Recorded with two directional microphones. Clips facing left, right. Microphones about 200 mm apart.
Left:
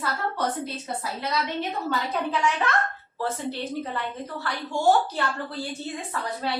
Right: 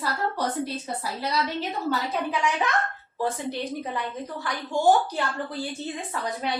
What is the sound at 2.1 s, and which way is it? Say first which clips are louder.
A woman's voice: even; 10° right (ahead or behind).